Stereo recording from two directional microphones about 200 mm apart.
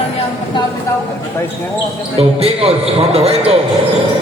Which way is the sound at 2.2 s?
30° right (ahead or behind).